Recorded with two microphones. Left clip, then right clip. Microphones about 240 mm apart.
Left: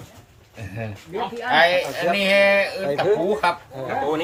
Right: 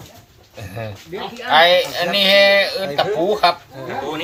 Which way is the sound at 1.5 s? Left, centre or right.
Centre.